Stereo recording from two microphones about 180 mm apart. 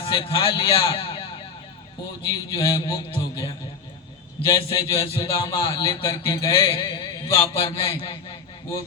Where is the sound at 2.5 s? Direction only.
25° left (ahead or behind).